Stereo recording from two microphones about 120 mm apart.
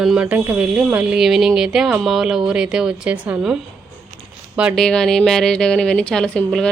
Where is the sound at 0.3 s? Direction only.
15° right (ahead or behind).